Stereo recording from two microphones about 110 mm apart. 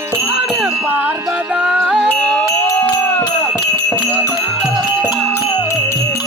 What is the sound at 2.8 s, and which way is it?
Music, 15° left (ahead or behind).